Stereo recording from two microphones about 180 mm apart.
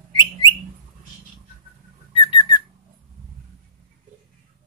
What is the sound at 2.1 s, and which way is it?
Whistling, 25° left (ahead or behind).